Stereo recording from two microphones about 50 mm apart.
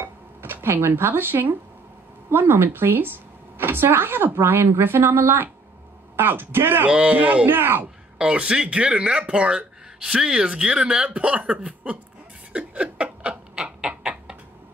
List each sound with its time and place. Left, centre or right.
0.0 s a sound: right
2.3 s a woman's voice: right
6.9 s speech: right
7.4 s a woman's voice: right
8.2 s speech: right
9.9 s speech: centre
12.5 s a sound: right